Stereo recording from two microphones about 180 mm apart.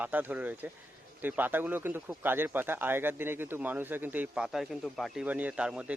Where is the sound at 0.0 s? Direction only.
10° right (ahead or behind).